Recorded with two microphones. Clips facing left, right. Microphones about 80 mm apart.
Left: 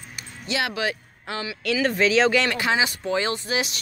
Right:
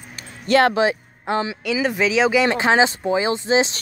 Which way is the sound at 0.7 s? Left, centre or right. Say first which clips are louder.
Right 8 dB; right.